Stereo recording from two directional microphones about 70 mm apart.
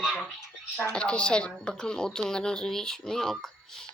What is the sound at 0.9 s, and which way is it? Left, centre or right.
Speech, centre.